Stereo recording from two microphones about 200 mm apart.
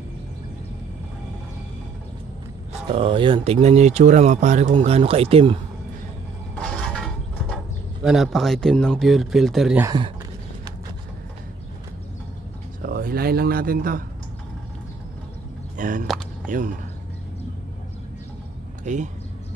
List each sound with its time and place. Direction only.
2.9 s speech: 25° right (ahead or behind)
6.9 s speech: centre (ahead or behind)
9.8 s speech: 25° right (ahead or behind)
12.8 s speech: 50° right (ahead or behind)
15.8 s speech: 45° right (ahead or behind)
18.9 s speech: 35° right (ahead or behind)